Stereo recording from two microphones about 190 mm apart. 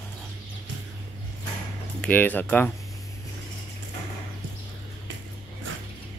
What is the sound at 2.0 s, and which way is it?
Speech, 10° left (ahead or behind).